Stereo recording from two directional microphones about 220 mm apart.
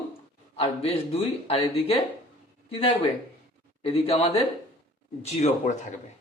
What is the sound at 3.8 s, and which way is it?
Speech, 25° left (ahead or behind).